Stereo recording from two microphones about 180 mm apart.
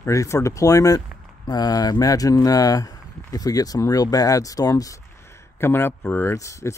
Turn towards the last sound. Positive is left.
turn(degrees=15)  # may be behind; listen again after turning